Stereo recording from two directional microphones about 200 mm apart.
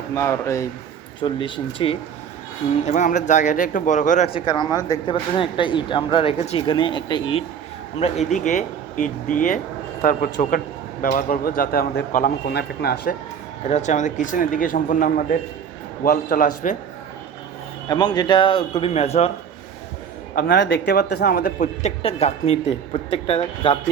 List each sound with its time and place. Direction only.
0.1 s speech: 15° left (ahead or behind)
2.8 s speech: 40° left (ahead or behind)
4.3 s speech: 25° left (ahead or behind); by 13.1 s 50° left (ahead or behind)
13.7 s speech: 35° left (ahead or behind)
17.8 s speech: 20° left (ahead or behind)
20.3 s speech: 50° left (ahead or behind); by 23.7 s 30° left (ahead or behind)